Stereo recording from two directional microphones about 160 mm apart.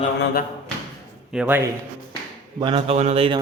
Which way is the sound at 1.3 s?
10° right (ahead or behind).